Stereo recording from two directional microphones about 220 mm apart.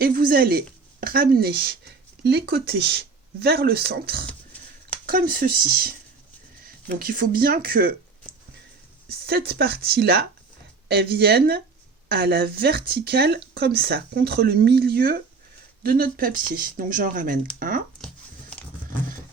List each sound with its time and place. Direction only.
0.0 s speech: 40° right (ahead or behind)
9.0 s a sound: 45° right (ahead or behind)
9.5 s speech: 45° right (ahead or behind)